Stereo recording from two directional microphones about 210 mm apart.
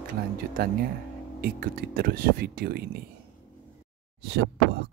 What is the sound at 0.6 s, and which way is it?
Speech, 45° right (ahead or behind).